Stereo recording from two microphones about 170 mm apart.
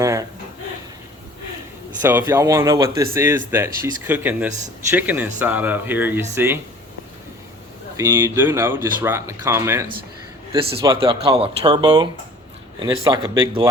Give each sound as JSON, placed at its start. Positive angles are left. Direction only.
{"t": 0.0, "sound": "a sound", "side_deg": -15}
{"t": 2.0, "sound": "speech", "side_deg": -10}
{"t": 7.9, "sound": "speech", "side_deg": -15}
{"t": 10.5, "sound": "speech", "side_deg": -35}